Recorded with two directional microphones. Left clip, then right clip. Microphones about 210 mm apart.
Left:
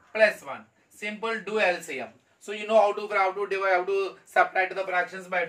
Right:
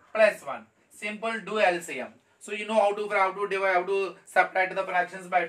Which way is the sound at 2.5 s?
20° right (ahead or behind).